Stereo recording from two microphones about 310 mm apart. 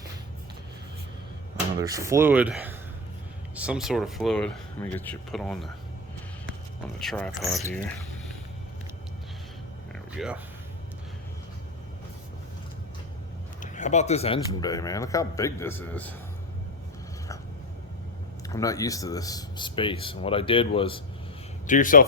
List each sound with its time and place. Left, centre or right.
1.8 s speech: centre
6.8 s speech: centre
9.9 s a sound: centre
13.6 s speech: left; by 16.1 s centre
18.4 s a man's voice: centre